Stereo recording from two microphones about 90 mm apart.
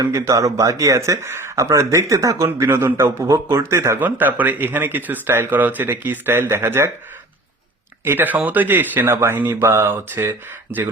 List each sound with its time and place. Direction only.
0.0 s speech: 35° right (ahead or behind)
2.5 s a man's voice: 25° right (ahead or behind)
8.0 s a man's voice: 20° right (ahead or behind)